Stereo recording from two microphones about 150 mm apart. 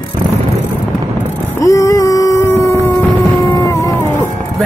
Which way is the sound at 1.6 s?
20° left (ahead or behind).